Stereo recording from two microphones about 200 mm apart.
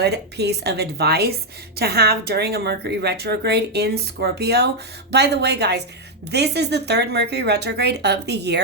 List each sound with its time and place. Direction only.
0.0 s speech: 55° right (ahead or behind)